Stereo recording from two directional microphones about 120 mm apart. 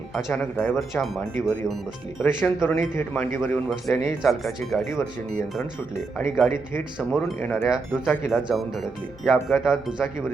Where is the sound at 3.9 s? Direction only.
25° left (ahead or behind).